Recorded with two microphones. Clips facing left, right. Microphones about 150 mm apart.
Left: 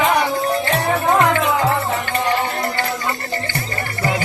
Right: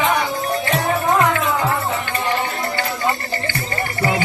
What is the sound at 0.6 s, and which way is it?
Music, 30° left (ahead or behind).